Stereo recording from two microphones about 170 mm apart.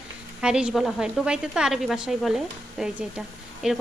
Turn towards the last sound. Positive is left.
turn(degrees=-5)  # may be behind; listen again after turning